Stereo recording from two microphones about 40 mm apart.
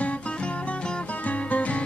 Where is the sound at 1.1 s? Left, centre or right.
Left.